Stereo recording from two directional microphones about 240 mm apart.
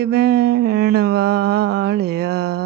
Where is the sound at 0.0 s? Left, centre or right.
Right.